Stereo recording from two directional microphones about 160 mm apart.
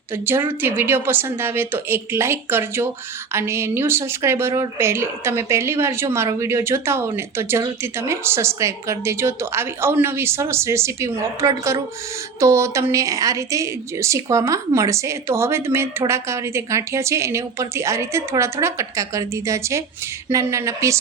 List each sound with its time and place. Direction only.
0.1 s a woman's voice: 15° right (ahead or behind)